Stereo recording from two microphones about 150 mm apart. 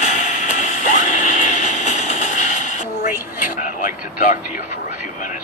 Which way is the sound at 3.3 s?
60° left (ahead or behind).